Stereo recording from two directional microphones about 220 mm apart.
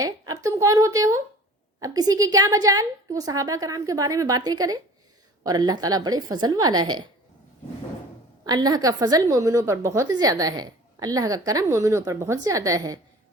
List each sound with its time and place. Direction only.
0.0 s a woman's voice: 15° right (ahead or behind)
8.4 s a woman's voice: 15° right (ahead or behind)